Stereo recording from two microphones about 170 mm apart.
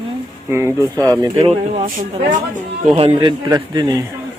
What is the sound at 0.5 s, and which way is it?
Speech, 15° right (ahead or behind).